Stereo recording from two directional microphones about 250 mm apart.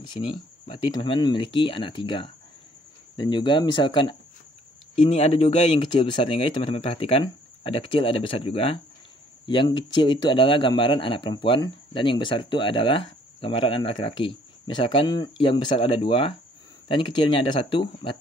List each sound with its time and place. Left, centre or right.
0.0 s speech: centre